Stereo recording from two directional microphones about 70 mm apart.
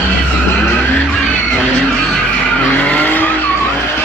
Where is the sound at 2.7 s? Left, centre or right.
Left.